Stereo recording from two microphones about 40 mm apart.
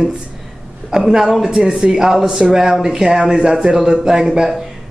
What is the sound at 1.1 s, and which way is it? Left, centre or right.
Speech, centre.